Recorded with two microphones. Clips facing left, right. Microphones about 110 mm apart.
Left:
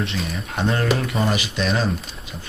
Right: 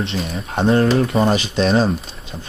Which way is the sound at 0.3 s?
30° right (ahead or behind).